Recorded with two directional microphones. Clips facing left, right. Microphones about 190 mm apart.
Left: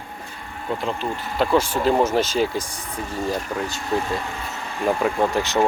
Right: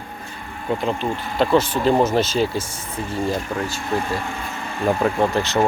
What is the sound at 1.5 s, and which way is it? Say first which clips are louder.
Speech: right 2 dB; 10° left (ahead or behind).